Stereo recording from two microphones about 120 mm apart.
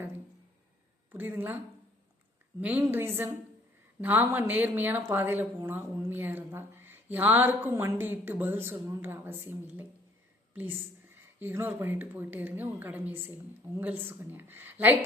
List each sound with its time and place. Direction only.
1.1 s speech: 15° right (ahead or behind)
2.6 s speech: 15° right (ahead or behind)